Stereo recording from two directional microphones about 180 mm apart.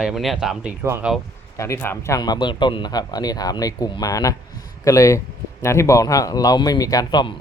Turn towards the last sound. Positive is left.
turn(degrees=25)  # may be behind; listen again after turning